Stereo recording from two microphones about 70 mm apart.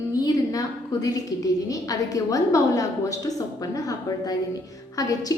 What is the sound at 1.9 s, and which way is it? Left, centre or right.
Speech, left.